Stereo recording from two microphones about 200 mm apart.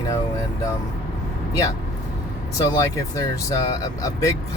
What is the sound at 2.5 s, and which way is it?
Speech, 15° left (ahead or behind).